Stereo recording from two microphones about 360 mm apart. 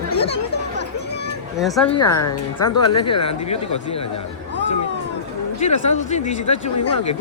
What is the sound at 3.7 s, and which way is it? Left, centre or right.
Speech, left.